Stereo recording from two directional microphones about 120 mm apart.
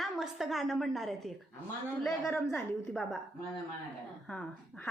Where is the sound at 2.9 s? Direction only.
Centre (ahead or behind).